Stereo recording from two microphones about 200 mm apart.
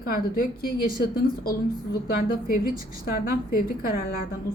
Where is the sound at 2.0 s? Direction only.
50° left (ahead or behind).